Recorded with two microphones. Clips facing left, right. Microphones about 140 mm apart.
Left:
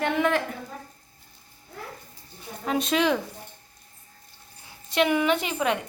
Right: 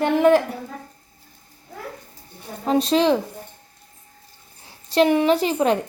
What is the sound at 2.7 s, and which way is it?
Speech, 30° right (ahead or behind).